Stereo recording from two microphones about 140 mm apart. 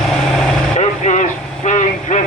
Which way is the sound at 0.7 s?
55° left (ahead or behind).